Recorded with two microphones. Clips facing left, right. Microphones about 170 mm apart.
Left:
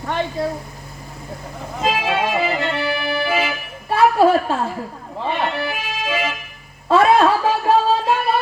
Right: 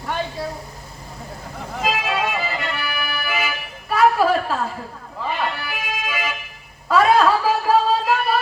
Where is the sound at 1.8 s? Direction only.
25° left (ahead or behind).